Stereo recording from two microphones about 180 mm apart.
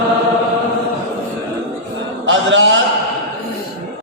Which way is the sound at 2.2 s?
90° right.